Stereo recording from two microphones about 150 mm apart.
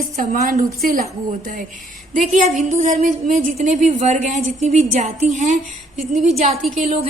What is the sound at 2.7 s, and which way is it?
Speech, 55° right (ahead or behind).